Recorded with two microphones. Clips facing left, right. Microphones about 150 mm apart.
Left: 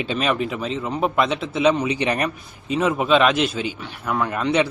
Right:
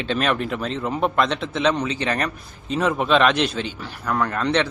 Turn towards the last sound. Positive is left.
turn(degrees=10)  # may be behind; listen again after turning